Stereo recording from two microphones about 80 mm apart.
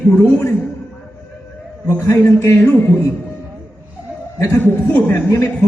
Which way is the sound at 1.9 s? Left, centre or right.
Left.